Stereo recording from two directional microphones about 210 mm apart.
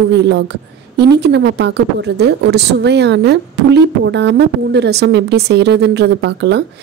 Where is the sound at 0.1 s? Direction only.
55° right (ahead or behind).